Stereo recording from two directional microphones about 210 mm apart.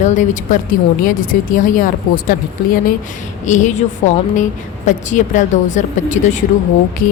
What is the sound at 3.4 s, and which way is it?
A woman's voice, 35° left (ahead or behind).